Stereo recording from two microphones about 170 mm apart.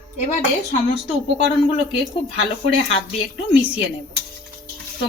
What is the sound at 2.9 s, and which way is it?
Speech, 35° left (ahead or behind).